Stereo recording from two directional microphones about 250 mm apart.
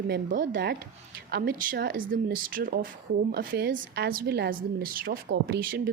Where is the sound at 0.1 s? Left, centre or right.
Right.